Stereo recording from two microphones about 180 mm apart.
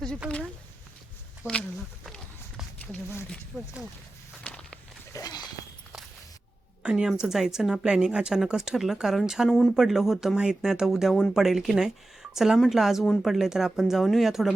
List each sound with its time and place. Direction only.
1.4 s speech: 10° right (ahead or behind)
2.0 s walk: centre (ahead or behind)
4.4 s walk: 5° left (ahead or behind)
5.1 s a sound: 20° left (ahead or behind)
6.8 s a woman's voice: 5° right (ahead or behind)